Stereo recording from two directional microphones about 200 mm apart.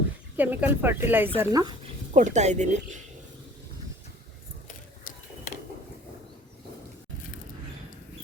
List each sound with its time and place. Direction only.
0.3 s speech: 10° right (ahead or behind)
2.1 s speech: 35° right (ahead or behind)